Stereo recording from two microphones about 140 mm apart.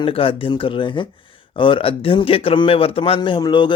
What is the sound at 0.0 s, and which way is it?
A man's voice, 40° left (ahead or behind).